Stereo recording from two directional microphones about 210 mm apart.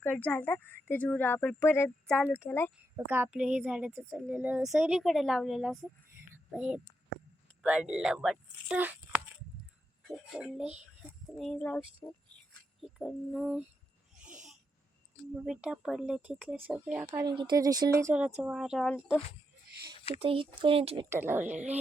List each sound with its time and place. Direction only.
0.0 s speech: 10° left (ahead or behind)
2.9 s a woman's voice: 10° right (ahead or behind)
14.2 s wheeze: 5° right (ahead or behind)
15.4 s a woman's voice: 5° right (ahead or behind)
17.2 s a woman's voice: 20° right (ahead or behind); by 18.9 s centre (ahead or behind)
20.1 s speech: 25° right (ahead or behind)
21.1 s speech: 10° right (ahead or behind)